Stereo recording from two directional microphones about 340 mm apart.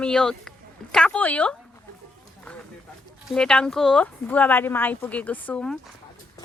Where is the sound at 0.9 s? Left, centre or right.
Centre.